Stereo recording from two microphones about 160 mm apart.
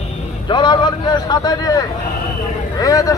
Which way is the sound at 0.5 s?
30° left (ahead or behind).